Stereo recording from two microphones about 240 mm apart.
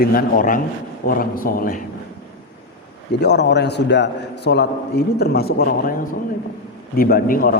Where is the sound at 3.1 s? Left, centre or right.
Left.